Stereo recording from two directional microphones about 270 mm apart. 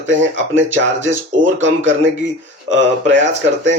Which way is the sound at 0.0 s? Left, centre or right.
Right.